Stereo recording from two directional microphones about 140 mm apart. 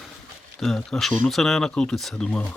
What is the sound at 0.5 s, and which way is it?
Speech, centre (ahead or behind).